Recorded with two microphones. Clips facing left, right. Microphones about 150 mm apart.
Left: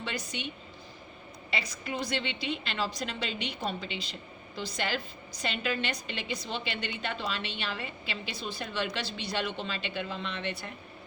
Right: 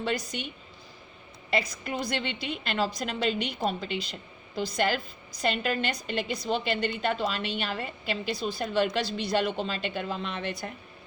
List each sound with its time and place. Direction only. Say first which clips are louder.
0.0 s a woman's voice: right 6 dB; 45° right (ahead or behind)
1.5 s a woman's voice: right 6 dB; 45° right (ahead or behind)